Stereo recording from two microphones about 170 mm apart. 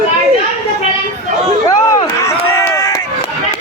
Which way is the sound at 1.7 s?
20° left (ahead or behind).